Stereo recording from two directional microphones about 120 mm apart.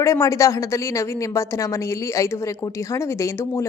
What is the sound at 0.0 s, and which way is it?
A woman's voice, 25° left (ahead or behind).